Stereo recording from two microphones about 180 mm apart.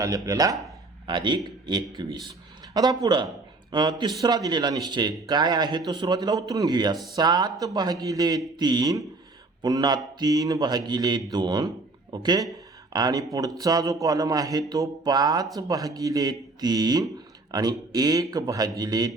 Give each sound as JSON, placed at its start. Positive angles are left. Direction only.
{"t": 0.0, "sound": "speech", "side_deg": -20}